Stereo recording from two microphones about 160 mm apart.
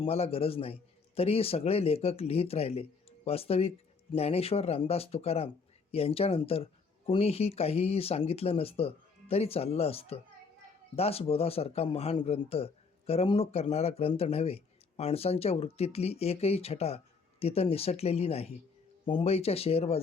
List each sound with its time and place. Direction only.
0.0 s speech: 40° left (ahead or behind)